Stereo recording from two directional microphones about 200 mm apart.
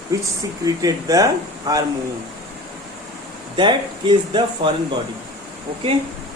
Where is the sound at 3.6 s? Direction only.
25° right (ahead or behind).